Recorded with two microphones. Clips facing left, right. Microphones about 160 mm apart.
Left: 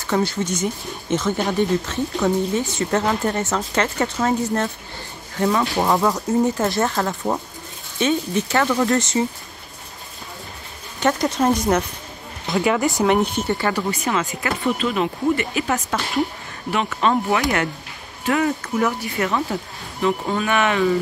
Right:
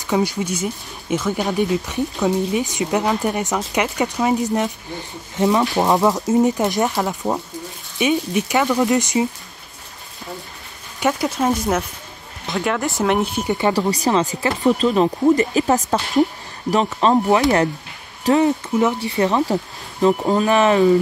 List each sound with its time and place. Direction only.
0.0 s speech: 15° right (ahead or behind)
11.0 s speech: 5° right (ahead or behind)
13.7 s speech: 35° right (ahead or behind)
17.0 s speech: 30° right (ahead or behind)